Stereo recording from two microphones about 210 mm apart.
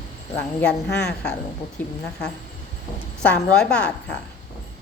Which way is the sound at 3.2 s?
5° left (ahead or behind).